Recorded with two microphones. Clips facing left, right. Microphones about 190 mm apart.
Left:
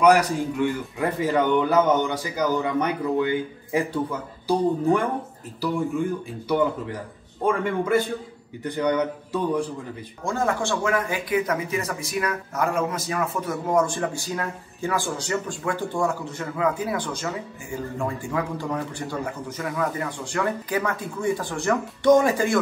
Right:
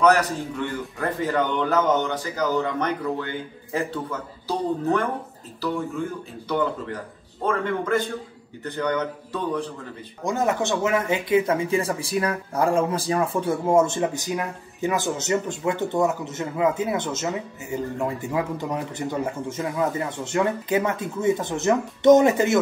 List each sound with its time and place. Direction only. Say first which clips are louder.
0.0 s a man's voice: left 2 dB; 10° left (ahead or behind)
6.5 s a man's voice: left 2 dB; 10° left (ahead or behind)
10.2 s speech: right 2 dB; 20° right (ahead or behind)